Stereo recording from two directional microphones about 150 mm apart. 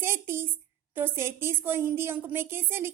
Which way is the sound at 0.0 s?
15° right (ahead or behind).